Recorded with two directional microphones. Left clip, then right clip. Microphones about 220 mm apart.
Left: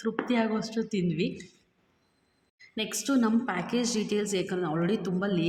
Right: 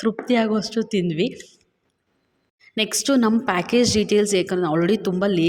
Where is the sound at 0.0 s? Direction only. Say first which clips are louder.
Right 8 dB; 40° right (ahead or behind).